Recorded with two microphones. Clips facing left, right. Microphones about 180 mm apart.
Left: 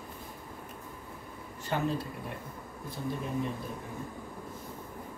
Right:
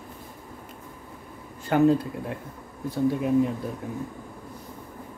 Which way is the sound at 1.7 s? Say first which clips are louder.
Right 11 dB; 65° right (ahead or behind).